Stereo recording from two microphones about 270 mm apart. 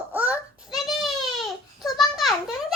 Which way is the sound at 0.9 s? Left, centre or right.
Centre.